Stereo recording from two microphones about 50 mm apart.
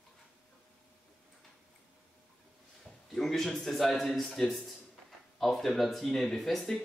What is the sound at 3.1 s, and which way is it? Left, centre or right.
A man's voice, centre.